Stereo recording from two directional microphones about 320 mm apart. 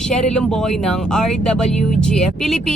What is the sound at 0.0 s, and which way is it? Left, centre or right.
Speech, centre.